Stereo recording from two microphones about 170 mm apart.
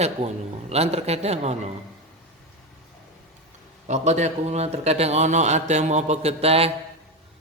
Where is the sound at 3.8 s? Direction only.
45° right (ahead or behind).